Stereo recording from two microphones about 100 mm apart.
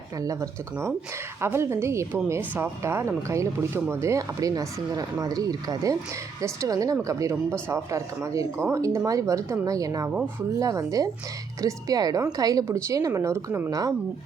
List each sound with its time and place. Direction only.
0.2 s speech: 35° right (ahead or behind)
13.7 s speech: 40° right (ahead or behind)